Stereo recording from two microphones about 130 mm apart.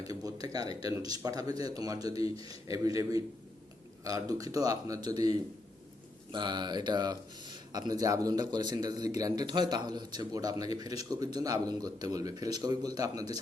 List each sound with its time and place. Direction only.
0.0 s a man's voice: 30° right (ahead or behind)